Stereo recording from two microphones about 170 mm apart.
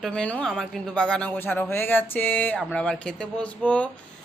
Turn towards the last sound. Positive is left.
turn(degrees=10)  # may be behind; listen again after turning